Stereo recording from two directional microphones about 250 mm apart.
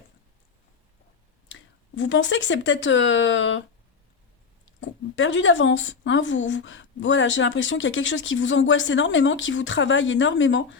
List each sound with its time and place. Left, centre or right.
1.5 s speech: left
4.8 s speech: left